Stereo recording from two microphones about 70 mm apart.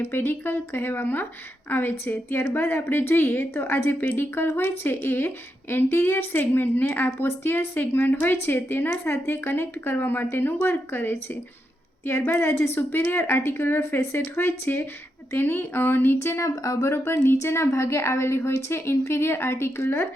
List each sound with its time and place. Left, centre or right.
0.0 s a woman's voice: left
16.9 s a woman's voice: left